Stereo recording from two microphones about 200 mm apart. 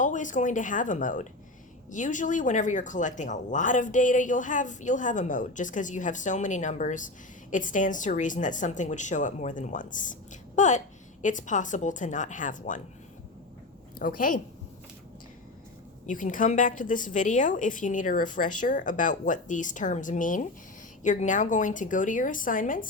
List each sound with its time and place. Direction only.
0.0 s a woman's voice: 40° left (ahead or behind)
14.0 s a woman's voice: 45° left (ahead or behind)
16.0 s a woman's voice: 40° left (ahead or behind)